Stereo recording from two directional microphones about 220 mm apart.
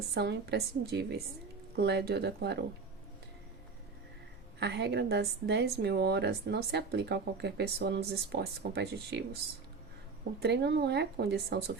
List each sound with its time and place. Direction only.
0.1 s a woman's voice: 50° right (ahead or behind)
4.6 s a woman's voice: 50° right (ahead or behind)
10.4 s a woman's voice: 50° right (ahead or behind)